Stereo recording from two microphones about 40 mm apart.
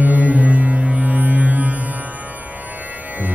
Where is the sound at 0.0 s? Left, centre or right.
Right.